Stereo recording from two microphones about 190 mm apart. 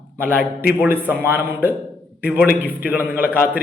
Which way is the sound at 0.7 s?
10° right (ahead or behind).